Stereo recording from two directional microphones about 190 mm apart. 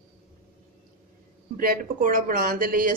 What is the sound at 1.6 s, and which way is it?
Speech, 45° right (ahead or behind).